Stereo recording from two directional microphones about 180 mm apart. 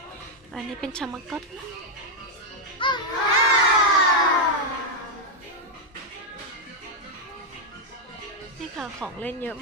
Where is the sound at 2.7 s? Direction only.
25° left (ahead or behind).